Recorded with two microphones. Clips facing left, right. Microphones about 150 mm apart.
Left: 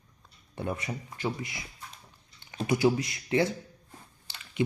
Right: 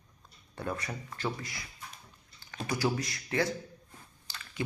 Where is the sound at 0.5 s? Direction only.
20° left (ahead or behind).